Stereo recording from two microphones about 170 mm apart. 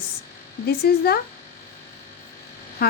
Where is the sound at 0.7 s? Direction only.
65° left (ahead or behind).